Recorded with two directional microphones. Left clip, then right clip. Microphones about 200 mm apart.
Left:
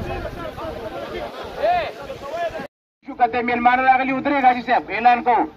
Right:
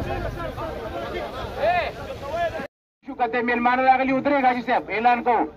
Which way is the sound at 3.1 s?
40° right (ahead or behind).